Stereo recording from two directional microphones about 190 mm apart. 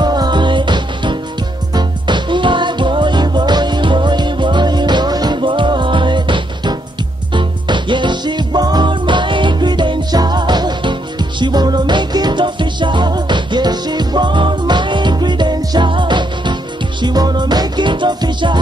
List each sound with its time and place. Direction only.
0.0 s music: 20° right (ahead or behind)